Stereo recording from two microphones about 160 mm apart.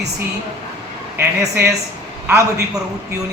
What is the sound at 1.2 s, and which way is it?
Speech, 15° right (ahead or behind).